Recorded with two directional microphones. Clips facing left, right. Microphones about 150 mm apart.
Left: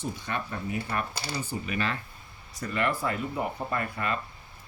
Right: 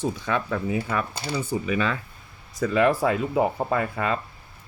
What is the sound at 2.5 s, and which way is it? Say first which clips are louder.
Speech: right 9 dB; 90° right.